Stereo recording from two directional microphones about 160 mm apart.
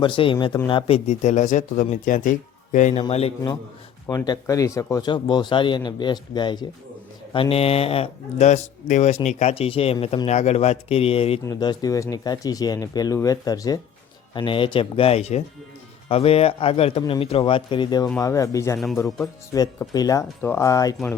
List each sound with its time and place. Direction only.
0.0 s speech: 30° left (ahead or behind)
4.0 s speech: 20° left (ahead or behind); by 11.3 s 35° left (ahead or behind)
11.4 s speech: 25° left (ahead or behind)